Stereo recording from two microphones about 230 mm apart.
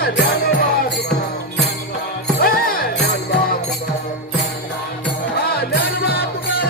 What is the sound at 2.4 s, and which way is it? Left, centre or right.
Music, left.